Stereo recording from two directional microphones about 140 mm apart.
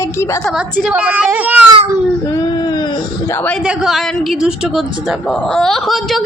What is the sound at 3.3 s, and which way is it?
Speech, 10° left (ahead or behind).